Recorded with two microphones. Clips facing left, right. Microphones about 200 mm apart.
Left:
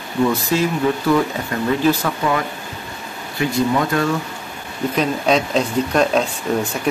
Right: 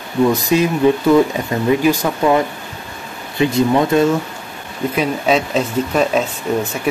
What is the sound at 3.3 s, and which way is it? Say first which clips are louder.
Speech: right 4 dB; 20° right (ahead or behind).